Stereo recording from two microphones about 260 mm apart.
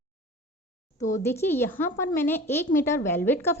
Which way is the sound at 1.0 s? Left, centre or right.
Centre.